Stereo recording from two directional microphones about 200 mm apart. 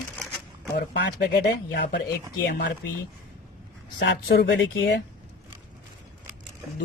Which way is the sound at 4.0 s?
60° left (ahead or behind).